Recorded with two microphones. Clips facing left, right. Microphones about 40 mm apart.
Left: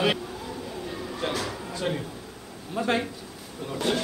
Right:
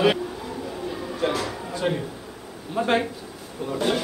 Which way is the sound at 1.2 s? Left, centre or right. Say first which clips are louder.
Right 5 dB; centre.